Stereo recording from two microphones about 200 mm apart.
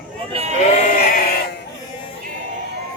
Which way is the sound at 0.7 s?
45° left (ahead or behind).